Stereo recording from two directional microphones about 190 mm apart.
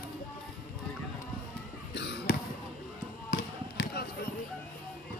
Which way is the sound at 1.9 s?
65° left (ahead or behind).